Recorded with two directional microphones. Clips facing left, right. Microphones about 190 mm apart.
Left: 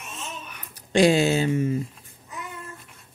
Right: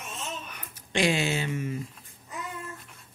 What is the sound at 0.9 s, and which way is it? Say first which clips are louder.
Speech: left 8 dB; 35° left (ahead or behind).